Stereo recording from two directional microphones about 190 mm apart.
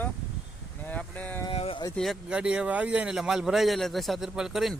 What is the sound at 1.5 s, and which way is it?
Speech, 30° left (ahead or behind).